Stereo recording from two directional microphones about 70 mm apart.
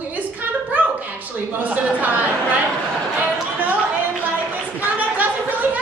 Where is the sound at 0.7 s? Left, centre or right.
Right.